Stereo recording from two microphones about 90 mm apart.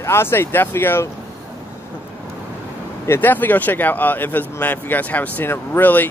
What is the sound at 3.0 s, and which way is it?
Speech, 25° left (ahead or behind).